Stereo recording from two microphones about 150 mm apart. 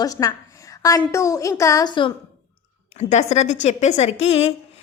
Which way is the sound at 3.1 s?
50° left (ahead or behind).